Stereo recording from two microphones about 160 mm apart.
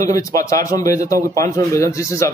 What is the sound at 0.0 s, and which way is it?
A man's voice, 20° left (ahead or behind).